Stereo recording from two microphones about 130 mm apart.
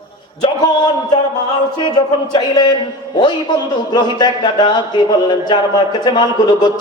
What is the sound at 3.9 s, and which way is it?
A man's voice, 35° left (ahead or behind).